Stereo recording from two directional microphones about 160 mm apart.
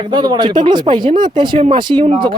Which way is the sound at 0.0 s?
25° right (ahead or behind).